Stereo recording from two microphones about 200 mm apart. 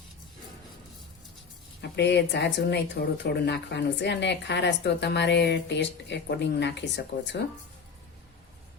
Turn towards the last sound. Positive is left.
turn(degrees=60)  # may be behind; listen again after turning